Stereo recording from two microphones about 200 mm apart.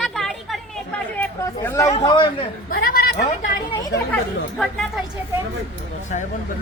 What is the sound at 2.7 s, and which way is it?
Speech, 50° left (ahead or behind).